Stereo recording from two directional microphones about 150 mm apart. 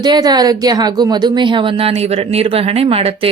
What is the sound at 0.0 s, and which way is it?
Speech, 25° right (ahead or behind).